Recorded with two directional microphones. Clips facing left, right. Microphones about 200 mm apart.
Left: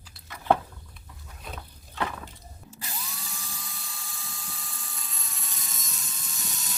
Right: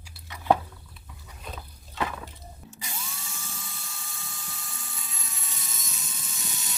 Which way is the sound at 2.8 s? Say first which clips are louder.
Even; centre (ahead or behind).